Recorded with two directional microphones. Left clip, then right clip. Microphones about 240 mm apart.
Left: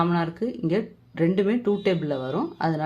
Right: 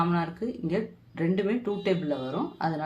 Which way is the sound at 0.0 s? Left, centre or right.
Left.